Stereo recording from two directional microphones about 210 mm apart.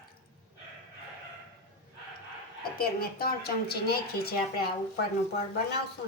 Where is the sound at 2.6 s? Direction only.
45° left (ahead or behind).